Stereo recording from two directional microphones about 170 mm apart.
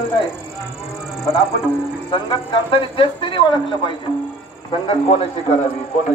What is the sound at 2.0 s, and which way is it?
A man's voice, 30° left (ahead or behind).